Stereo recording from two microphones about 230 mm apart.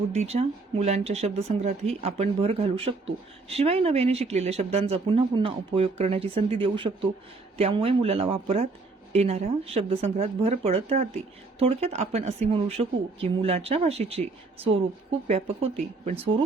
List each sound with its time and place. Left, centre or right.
0.1 s speech: right